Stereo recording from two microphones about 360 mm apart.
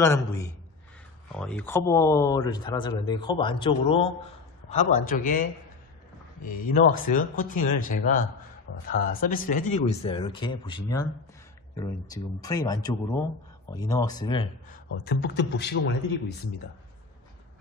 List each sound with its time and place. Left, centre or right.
0.0 s speech: centre
15.0 s speech: left